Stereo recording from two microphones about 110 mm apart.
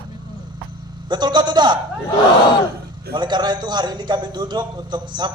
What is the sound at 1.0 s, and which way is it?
Speech, 40° right (ahead or behind).